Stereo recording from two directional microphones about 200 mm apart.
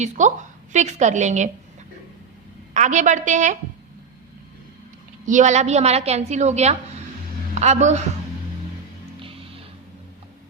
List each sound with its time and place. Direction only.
0.0 s a woman's voice: 35° right (ahead or behind)
2.7 s a woman's voice: 35° right (ahead or behind)
5.2 s a woman's voice: 40° right (ahead or behind)